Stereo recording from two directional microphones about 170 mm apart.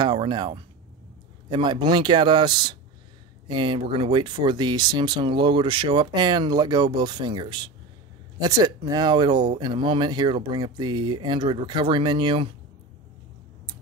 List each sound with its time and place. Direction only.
0.0 s speech: 30° right (ahead or behind)